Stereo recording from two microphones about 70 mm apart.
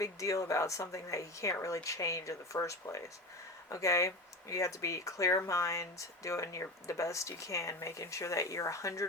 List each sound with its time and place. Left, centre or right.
0.0 s speech: left